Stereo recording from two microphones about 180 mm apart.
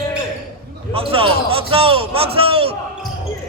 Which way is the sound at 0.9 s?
30° right (ahead or behind).